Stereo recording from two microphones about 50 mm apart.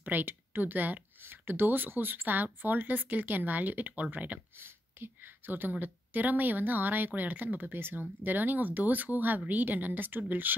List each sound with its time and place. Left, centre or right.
0.0 s a woman's voice: right
4.6 s a woman's voice: right